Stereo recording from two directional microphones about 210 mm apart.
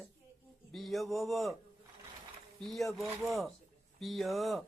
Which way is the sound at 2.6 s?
Centre (ahead or behind).